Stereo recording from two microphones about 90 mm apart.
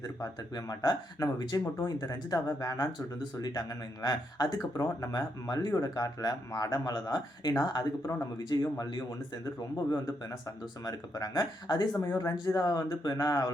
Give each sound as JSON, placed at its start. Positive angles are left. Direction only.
{"t": 0.0, "sound": "speech", "side_deg": 45}
{"t": 10.8, "sound": "speech", "side_deg": 45}